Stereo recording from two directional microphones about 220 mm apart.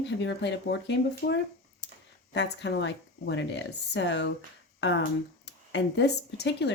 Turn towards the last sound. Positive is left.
turn(degrees=50)  # may be behind; listen again after turning